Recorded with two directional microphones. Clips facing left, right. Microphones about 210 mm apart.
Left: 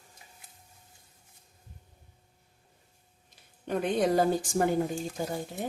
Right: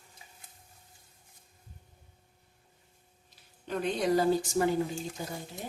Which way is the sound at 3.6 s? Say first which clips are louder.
Left 3 dB; 55° left (ahead or behind).